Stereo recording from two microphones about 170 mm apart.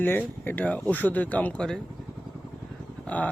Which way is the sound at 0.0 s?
10° left (ahead or behind).